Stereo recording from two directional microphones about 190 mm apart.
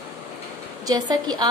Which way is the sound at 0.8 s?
20° right (ahead or behind).